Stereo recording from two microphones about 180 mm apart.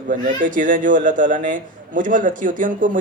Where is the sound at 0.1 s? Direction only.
45° right (ahead or behind).